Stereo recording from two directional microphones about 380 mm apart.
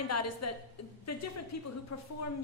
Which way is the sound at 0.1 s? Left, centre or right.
Left.